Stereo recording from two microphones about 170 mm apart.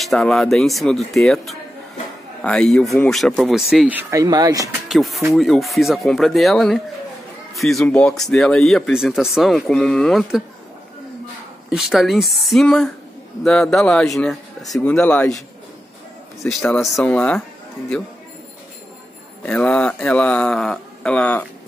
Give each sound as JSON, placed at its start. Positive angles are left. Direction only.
{"t": 0.0, "sound": "speech", "side_deg": 0}
{"t": 4.1, "sound": "speech", "side_deg": -20}
{"t": 4.8, "sound": "speech", "side_deg": 0}
{"t": 11.7, "sound": "speech", "side_deg": 0}
{"t": 16.4, "sound": "speech", "side_deg": 5}
{"t": 19.4, "sound": "speech", "side_deg": 5}